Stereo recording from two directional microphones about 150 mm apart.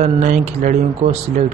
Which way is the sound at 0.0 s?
55° right (ahead or behind).